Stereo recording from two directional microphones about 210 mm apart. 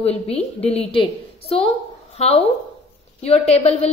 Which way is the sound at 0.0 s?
30° left (ahead or behind).